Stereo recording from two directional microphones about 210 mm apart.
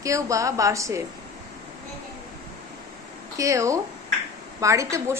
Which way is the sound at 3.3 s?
15° right (ahead or behind).